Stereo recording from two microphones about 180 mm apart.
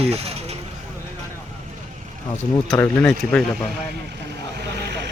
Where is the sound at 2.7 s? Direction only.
10° left (ahead or behind).